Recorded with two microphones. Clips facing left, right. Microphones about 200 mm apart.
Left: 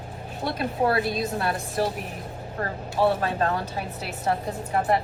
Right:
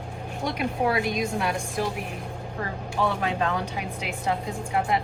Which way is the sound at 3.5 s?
40° left (ahead or behind).